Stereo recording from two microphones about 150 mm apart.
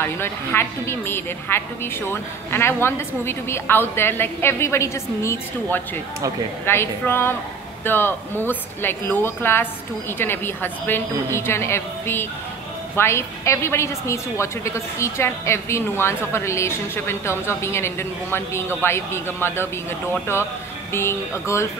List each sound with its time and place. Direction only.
0.0 s a woman's voice: 15° left (ahead or behind)